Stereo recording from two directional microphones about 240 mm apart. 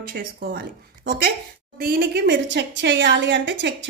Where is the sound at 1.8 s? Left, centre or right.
Right.